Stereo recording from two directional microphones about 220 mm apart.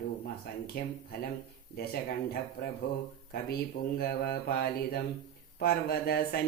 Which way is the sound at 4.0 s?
45° left (ahead or behind).